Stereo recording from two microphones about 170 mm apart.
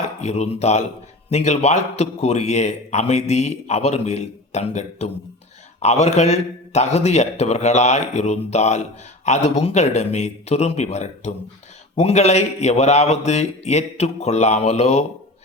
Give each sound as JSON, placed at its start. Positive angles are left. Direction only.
{"t": 0.2, "sound": "a man's voice", "side_deg": 40}